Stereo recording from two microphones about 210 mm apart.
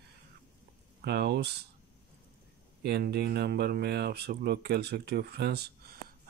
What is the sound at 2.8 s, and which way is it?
Speech, 50° right (ahead or behind).